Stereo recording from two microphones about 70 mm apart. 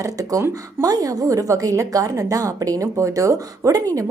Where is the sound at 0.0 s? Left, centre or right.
Right.